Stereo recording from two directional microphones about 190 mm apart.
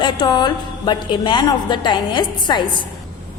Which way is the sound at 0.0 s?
25° left (ahead or behind).